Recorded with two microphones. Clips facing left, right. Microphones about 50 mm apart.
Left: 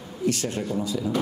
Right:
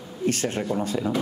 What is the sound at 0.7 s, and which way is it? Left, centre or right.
Speech, right.